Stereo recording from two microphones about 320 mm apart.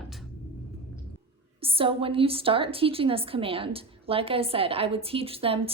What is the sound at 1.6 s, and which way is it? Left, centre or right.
A woman's voice, centre.